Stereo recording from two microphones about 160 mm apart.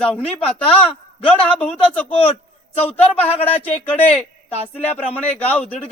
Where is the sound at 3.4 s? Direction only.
10° left (ahead or behind).